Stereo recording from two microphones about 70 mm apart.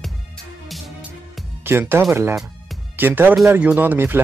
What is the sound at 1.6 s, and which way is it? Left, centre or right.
Speech, right.